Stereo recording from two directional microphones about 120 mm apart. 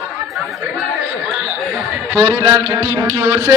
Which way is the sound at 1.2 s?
10° right (ahead or behind).